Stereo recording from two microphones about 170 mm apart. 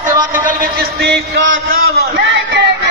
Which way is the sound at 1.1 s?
85° right.